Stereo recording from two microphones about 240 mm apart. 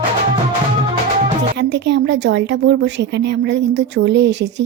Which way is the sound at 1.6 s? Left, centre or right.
Right.